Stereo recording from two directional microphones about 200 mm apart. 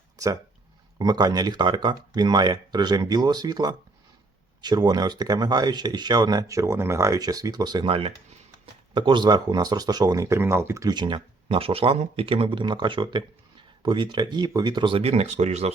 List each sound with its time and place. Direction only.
0.9 s speech: 20° right (ahead or behind)